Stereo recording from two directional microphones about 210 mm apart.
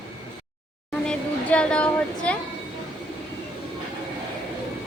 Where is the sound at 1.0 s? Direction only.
5° left (ahead or behind).